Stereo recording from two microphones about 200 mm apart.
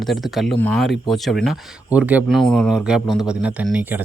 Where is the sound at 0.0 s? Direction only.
Centre (ahead or behind).